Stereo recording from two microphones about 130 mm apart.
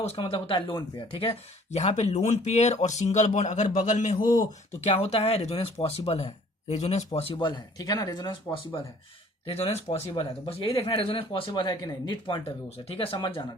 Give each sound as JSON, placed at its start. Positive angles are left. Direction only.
{"t": 0.2, "sound": "speech", "side_deg": 40}
{"t": 1.7, "sound": "speech", "side_deg": 60}
{"t": 4.8, "sound": "speech", "side_deg": 55}
{"t": 9.5, "sound": "speech", "side_deg": 50}